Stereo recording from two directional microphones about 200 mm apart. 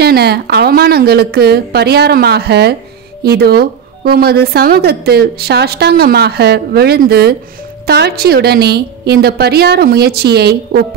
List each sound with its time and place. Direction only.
0.0 s speech: 55° right (ahead or behind)